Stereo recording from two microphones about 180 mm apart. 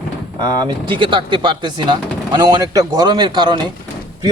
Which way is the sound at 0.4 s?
25° right (ahead or behind).